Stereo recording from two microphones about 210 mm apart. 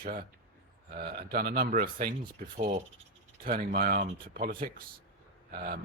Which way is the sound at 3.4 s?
45° right (ahead or behind).